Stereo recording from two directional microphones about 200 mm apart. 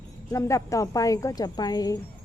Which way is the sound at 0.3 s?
15° left (ahead or behind).